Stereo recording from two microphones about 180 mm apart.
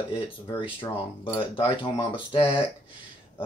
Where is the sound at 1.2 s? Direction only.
30° left (ahead or behind).